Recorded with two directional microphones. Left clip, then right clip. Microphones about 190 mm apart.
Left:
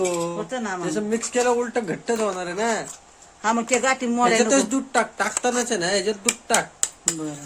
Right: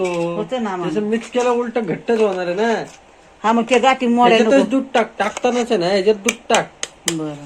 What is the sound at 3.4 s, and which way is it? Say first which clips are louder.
Speech: right 6 dB; 10° right (ahead or behind).